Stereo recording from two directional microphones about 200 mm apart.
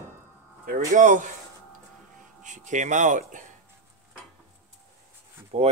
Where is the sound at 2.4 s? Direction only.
40° right (ahead or behind).